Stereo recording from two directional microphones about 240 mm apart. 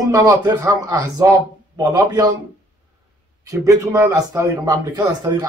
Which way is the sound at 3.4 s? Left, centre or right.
Centre.